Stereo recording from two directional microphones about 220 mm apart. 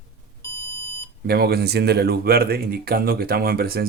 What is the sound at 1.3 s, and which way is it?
Speech, 45° right (ahead or behind).